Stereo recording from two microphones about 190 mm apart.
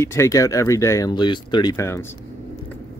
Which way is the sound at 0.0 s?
15° left (ahead or behind).